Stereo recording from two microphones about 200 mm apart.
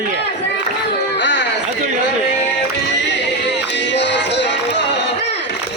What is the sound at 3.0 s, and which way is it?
Music, 60° left (ahead or behind).